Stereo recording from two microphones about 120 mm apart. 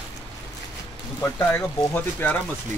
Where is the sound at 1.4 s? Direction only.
15° left (ahead or behind).